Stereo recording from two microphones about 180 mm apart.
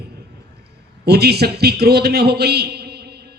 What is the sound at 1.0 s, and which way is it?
A man's voice, 65° right (ahead or behind).